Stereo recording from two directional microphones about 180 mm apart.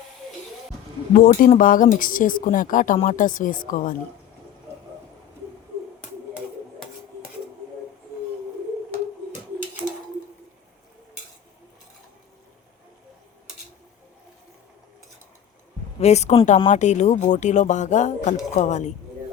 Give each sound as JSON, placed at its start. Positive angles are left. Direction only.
{"t": 1.1, "sound": "speech", "side_deg": 50}
{"t": 16.0, "sound": "speech", "side_deg": 40}